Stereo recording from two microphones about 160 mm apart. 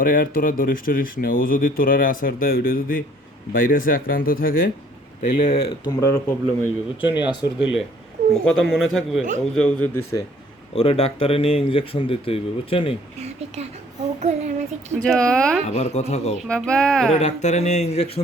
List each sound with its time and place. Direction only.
0.0 s speech: 60° left (ahead or behind)
5.4 s speech: 45° left (ahead or behind)
5.8 s speech: 20° left (ahead or behind)
8.3 s a man's voice: centre (ahead or behind)
10.8 s speech: 40° left (ahead or behind)
14.2 s speech: 45° right (ahead or behind)
14.9 s speech: 5° left (ahead or behind)
15.7 s speech: 45° left (ahead or behind)
16.5 s speech: 5° left (ahead or behind)
17.2 s speech: 45° left (ahead or behind)